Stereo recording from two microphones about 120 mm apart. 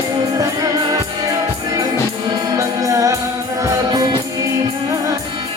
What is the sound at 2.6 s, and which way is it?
Music, 25° right (ahead or behind).